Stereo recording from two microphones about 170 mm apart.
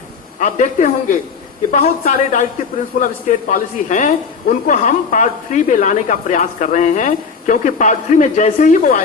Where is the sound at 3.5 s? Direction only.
50° left (ahead or behind).